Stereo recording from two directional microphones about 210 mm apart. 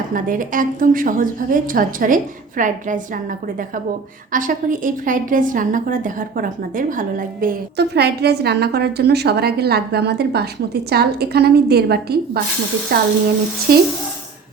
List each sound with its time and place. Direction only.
0.1 s a woman's voice: 40° right (ahead or behind)